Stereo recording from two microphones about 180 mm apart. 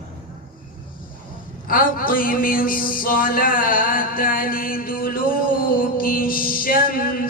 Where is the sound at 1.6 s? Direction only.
50° left (ahead or behind).